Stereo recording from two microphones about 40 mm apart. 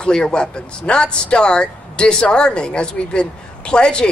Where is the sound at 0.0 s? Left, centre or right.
Left.